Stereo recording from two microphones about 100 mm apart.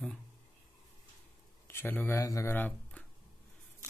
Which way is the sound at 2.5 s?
20° left (ahead or behind).